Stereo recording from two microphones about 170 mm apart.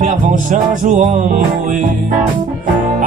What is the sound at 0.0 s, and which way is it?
Music, 50° right (ahead or behind).